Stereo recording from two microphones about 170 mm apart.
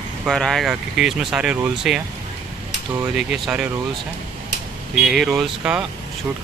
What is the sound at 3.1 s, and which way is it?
Speech, centre (ahead or behind).